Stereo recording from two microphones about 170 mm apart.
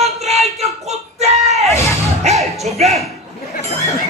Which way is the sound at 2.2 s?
40° right (ahead or behind).